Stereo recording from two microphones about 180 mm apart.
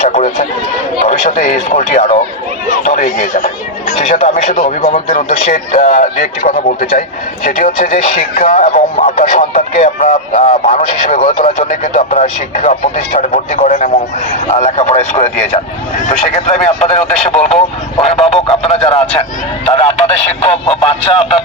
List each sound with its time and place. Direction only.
0.0 s run: 40° left (ahead or behind)
1.0 s speech: 40° left (ahead or behind)
17.2 s speech: 5° left (ahead or behind)
18.0 s speech: 35° left (ahead or behind)